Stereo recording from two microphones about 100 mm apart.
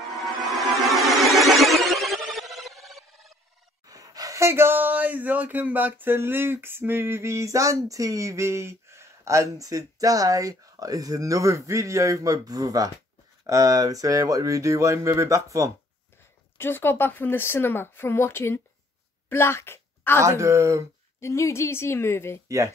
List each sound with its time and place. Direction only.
0.5 s music: centre (ahead or behind)
3.8 s speech: 35° right (ahead or behind)
16.5 s speech: 20° left (ahead or behind)
20.2 s speech: 30° right (ahead or behind)
21.2 s speech: 30° left (ahead or behind)